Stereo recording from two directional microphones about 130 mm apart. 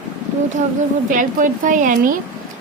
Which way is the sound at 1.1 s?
90° right.